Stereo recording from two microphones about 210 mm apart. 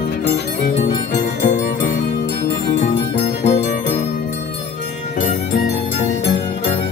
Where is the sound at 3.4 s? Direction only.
35° left (ahead or behind).